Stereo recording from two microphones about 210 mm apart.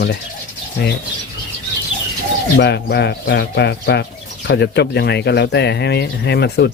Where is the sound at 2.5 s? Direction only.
55° left (ahead or behind).